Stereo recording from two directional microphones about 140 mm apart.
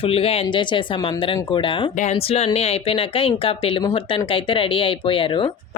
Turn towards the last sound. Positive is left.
turn(degrees=40)  # may be behind; listen again after turning